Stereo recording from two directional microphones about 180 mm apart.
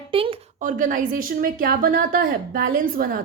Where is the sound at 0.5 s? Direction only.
50° right (ahead or behind).